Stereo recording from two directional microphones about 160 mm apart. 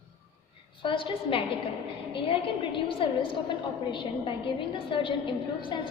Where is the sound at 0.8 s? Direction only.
30° left (ahead or behind).